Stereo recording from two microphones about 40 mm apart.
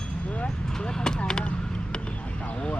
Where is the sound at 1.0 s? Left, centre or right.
Centre.